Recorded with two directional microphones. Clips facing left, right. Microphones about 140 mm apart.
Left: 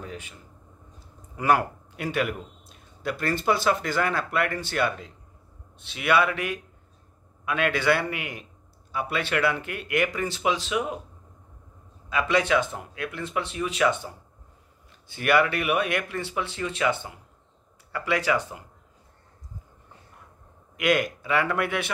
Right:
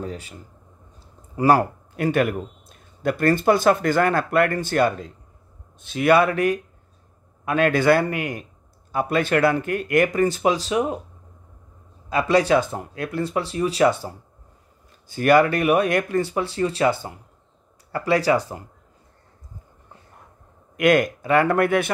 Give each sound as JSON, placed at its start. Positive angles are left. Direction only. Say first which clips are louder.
{"t": 0.0, "sound": "speech", "louder": "right 7 dB", "side_deg": -35}
{"t": 0.9, "sound": "a sound", "louder": "right 9 dB", "side_deg": -35}
{"t": 2.0, "sound": "speech", "louder": "right 7 dB", "side_deg": -50}
{"t": 12.1, "sound": "speech", "louder": "right 5 dB", "side_deg": -35}
{"t": 20.7, "sound": "speech", "louder": "right 6 dB", "side_deg": -45}